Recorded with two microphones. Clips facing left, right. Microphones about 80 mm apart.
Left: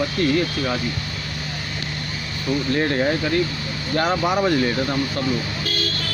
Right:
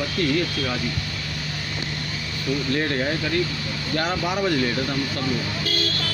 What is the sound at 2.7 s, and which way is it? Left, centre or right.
Speech, left.